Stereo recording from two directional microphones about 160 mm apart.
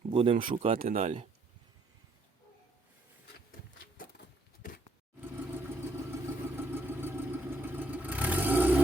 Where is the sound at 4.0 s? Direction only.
60° left (ahead or behind).